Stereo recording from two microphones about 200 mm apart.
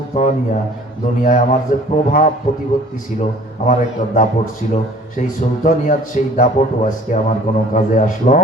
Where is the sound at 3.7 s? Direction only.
40° left (ahead or behind).